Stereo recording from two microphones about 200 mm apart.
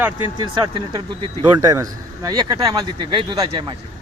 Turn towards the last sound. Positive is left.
turn(degrees=-20)  # may be behind; listen again after turning